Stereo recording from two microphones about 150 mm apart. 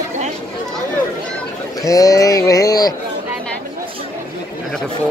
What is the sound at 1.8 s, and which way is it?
Speech, 25° left (ahead or behind).